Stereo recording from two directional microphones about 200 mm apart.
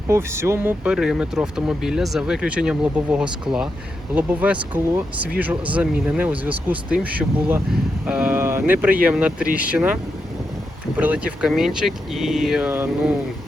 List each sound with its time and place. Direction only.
0.1 s speech: 15° right (ahead or behind)